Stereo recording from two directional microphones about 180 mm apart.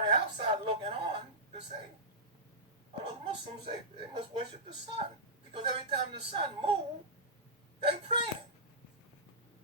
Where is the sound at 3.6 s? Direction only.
30° right (ahead or behind).